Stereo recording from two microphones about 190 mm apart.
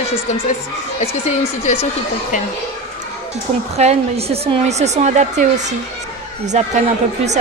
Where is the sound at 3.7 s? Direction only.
35° right (ahead or behind).